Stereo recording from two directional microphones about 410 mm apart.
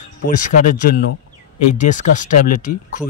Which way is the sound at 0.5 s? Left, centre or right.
Centre.